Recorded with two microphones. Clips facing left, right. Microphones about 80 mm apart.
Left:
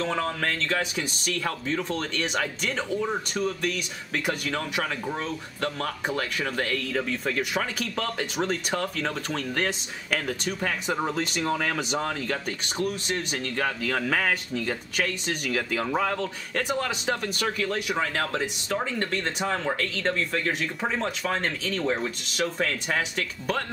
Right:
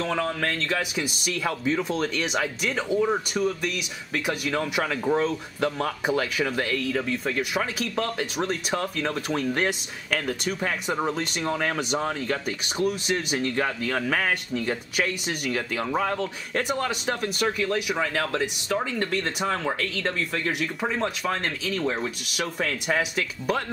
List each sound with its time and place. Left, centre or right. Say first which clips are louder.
0.7 s speech: right 1 dB; centre
4.6 s speech: right 3 dB; centre
13.8 s speech: even; centre